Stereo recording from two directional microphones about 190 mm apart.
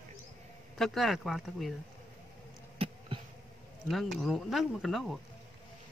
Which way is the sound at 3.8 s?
Centre (ahead or behind).